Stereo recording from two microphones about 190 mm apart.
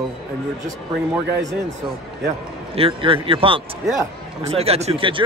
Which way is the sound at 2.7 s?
30° right (ahead or behind).